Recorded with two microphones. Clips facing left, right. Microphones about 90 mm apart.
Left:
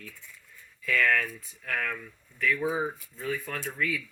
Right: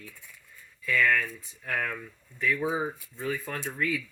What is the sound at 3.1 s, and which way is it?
Speech, 30° right (ahead or behind).